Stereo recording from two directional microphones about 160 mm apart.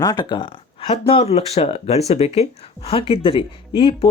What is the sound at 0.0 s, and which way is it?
Speech, 25° left (ahead or behind).